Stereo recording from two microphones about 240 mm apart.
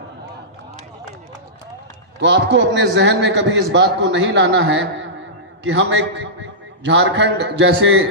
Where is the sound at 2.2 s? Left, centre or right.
Right.